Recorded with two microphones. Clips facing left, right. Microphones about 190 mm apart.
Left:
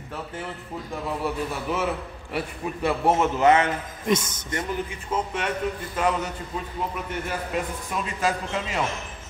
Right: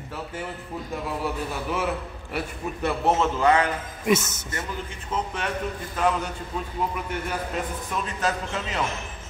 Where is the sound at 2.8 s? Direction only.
10° left (ahead or behind).